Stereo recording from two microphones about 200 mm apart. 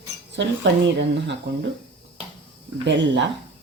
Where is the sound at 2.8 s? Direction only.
65° right (ahead or behind).